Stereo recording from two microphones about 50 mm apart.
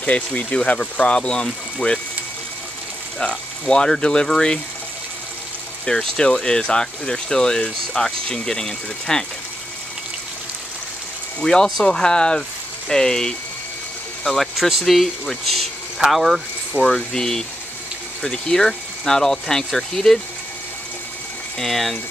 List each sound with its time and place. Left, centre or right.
0.0 s speech: left
3.2 s speech: centre
5.9 s speech: centre
11.4 s speech: centre
14.5 s speech: centre
16.7 s speech: centre
21.5 s speech: centre